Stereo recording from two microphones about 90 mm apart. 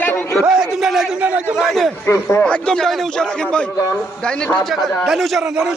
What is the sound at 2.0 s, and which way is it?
Speech, 30° left (ahead or behind).